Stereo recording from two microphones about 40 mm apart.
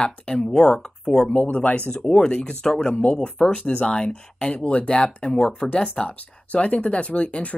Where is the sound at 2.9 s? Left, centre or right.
Left.